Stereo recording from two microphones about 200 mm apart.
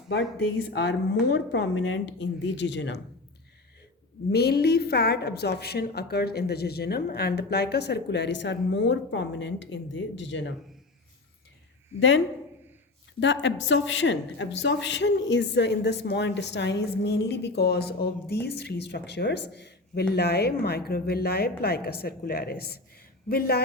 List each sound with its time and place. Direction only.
0.7 s speech: 60° left (ahead or behind)
4.3 s speech: 55° left (ahead or behind)
11.9 s speech: 70° left (ahead or behind); by 23.6 s 50° left (ahead or behind)